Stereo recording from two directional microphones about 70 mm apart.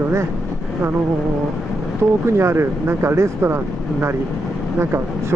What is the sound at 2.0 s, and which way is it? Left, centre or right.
Speech, right.